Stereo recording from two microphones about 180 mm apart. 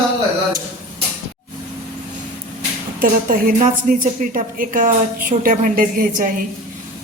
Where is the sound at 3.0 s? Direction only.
50° right (ahead or behind).